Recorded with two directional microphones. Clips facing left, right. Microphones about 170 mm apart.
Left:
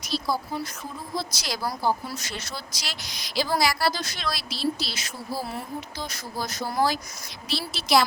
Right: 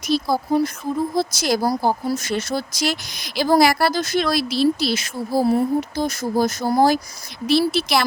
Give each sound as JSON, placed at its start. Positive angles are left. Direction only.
{"t": 0.1, "sound": "speech", "side_deg": -55}
{"t": 7.7, "sound": "a woman's voice", "side_deg": -60}